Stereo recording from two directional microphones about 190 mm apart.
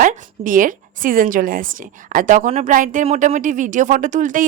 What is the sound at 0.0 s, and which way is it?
A woman's voice, 45° right (ahead or behind).